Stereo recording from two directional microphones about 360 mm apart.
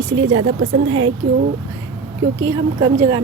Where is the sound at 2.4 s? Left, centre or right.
Centre.